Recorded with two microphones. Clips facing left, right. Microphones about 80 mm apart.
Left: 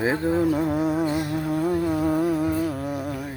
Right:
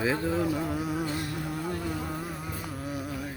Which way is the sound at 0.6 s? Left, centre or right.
Left.